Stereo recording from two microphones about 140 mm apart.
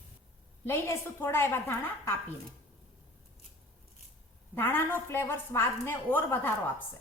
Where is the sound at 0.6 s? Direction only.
15° left (ahead or behind).